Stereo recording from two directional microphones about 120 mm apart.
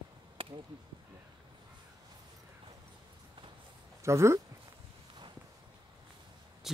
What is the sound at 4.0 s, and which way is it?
Speech, 25° right (ahead or behind).